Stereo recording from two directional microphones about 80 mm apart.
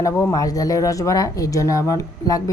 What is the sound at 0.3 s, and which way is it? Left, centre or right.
A woman's voice, left.